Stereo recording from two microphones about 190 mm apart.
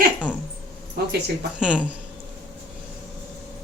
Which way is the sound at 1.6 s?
5° right (ahead or behind).